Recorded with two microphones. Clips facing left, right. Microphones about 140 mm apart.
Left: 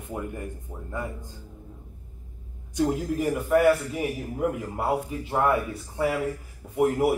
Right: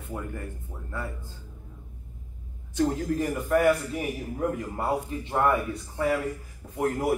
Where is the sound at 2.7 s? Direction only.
10° left (ahead or behind).